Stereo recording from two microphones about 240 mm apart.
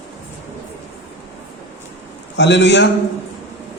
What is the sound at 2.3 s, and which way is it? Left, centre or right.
Speech, left.